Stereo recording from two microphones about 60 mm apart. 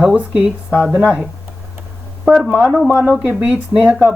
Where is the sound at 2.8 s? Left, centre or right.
Right.